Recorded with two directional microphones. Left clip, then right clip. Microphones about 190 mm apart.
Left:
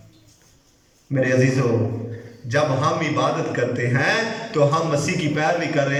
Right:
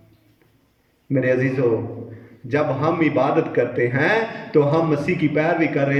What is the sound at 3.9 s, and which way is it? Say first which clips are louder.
A man's voice: right 1 dB; 30° right (ahead or behind).